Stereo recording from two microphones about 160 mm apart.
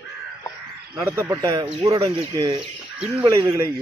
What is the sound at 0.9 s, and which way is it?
Speech, 15° right (ahead or behind).